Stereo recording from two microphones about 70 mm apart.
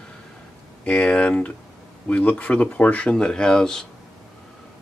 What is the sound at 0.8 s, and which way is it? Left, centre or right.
Speech, centre.